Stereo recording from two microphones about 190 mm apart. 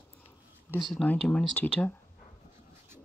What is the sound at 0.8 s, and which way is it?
Speech, centre (ahead or behind).